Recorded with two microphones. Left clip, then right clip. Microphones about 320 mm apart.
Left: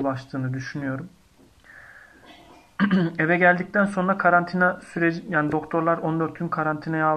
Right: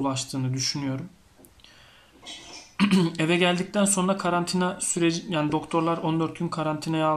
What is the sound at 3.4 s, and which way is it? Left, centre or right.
Speech, centre.